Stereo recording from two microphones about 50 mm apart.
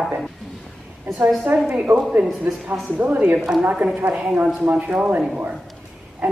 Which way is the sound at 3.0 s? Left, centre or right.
Right.